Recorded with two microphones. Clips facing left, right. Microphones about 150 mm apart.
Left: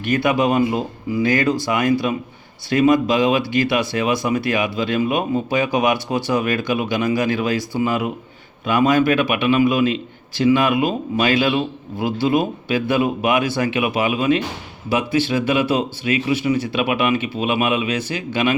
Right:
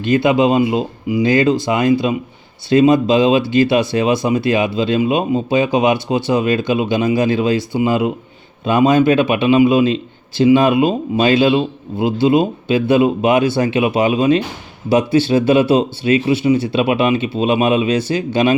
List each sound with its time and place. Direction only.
0.0 s a man's voice: 25° right (ahead or behind)